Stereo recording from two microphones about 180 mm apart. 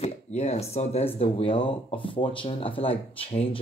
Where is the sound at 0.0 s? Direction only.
40° left (ahead or behind).